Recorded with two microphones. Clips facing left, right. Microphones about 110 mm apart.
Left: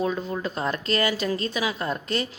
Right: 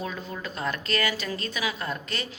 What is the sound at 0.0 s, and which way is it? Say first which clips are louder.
A woman's voice: left 7 dB; 25° left (ahead or behind).